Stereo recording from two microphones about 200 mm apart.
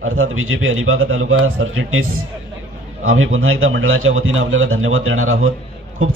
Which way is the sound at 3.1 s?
90° right.